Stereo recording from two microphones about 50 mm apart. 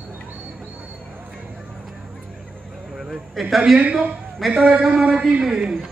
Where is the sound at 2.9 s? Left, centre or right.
Centre.